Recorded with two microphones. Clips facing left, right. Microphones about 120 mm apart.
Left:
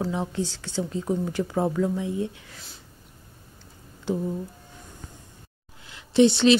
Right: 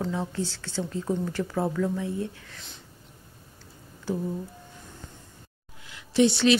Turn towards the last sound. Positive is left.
turn(degrees=25)  # may be behind; listen again after turning